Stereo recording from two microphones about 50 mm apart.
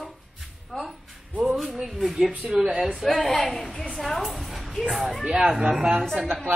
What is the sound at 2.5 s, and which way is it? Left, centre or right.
Speech, centre.